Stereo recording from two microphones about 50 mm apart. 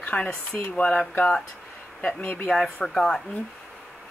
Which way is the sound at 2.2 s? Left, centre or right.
Left.